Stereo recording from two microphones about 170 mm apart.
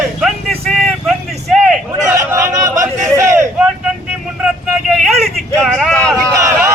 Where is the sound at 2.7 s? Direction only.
15° right (ahead or behind).